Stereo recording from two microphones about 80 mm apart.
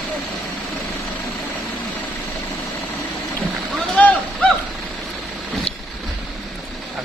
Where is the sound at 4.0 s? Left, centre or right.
Centre.